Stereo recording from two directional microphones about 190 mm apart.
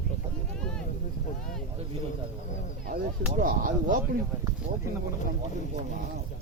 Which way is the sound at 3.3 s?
45° right (ahead or behind).